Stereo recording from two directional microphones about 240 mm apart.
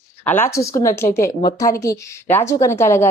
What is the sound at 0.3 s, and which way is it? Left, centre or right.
A woman's voice, centre.